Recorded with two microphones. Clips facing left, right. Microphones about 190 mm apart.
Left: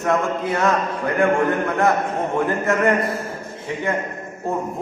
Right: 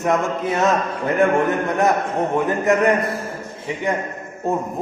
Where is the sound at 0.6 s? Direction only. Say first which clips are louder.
Right 1 dB; 20° right (ahead or behind).